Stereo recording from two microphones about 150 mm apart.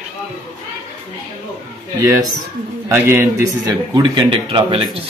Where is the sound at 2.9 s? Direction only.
15° right (ahead or behind); by 5.0 s 35° right (ahead or behind).